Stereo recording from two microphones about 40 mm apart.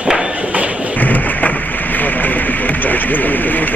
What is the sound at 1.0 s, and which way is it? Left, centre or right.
Thump, left.